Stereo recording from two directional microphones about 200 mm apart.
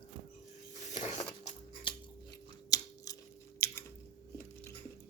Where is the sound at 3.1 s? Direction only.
20° left (ahead or behind).